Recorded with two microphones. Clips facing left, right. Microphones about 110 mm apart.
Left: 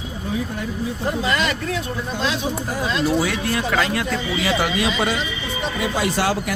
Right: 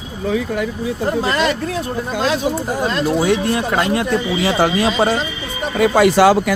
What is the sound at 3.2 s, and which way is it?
Speech, 25° right (ahead or behind).